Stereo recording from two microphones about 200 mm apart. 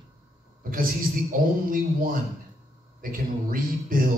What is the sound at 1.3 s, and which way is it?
A man's voice, 45° right (ahead or behind).